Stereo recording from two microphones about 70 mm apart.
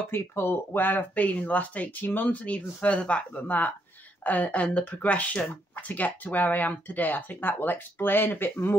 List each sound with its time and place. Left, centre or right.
0.1 s speech: left